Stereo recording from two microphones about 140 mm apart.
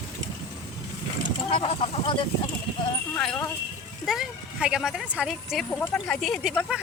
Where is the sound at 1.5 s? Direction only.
45° left (ahead or behind).